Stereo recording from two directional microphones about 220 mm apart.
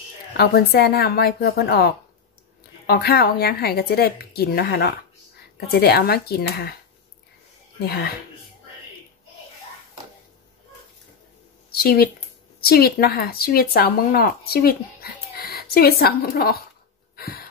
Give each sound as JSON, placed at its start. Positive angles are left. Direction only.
{"t": 0.4, "sound": "speech", "side_deg": 45}
{"t": 2.9, "sound": "speech", "side_deg": 45}
{"t": 7.8, "sound": "speech", "side_deg": 45}
{"t": 11.7, "sound": "speech", "side_deg": 45}
{"t": 17.2, "sound": "gasp", "side_deg": 45}